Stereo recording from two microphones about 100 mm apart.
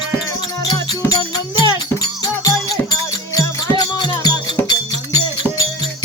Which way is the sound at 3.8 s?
45° left (ahead or behind).